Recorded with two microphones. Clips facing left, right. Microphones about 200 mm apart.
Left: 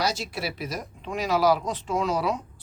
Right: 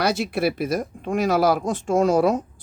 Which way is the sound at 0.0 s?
60° right (ahead or behind).